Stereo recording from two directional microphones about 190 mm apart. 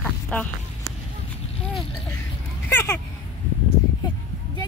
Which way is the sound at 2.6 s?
10° left (ahead or behind).